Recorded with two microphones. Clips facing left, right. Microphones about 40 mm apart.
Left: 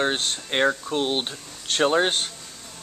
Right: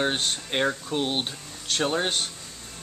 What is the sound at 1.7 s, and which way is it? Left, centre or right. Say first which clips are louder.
Speech: left 5 dB; left.